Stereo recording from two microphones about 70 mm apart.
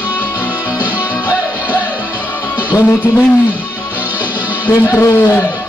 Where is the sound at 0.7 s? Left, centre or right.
Right.